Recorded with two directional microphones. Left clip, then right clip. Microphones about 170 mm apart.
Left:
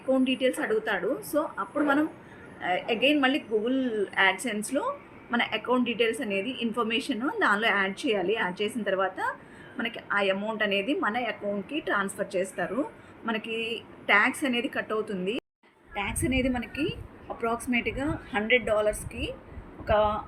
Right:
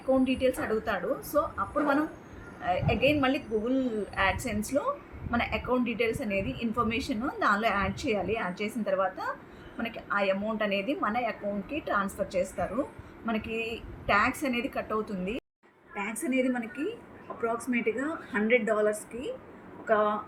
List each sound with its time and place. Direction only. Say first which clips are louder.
0.1 s a woman's voice: left 1 dB; 10° left (ahead or behind)
16.0 s a woman's voice: left 1 dB; 50° left (ahead or behind)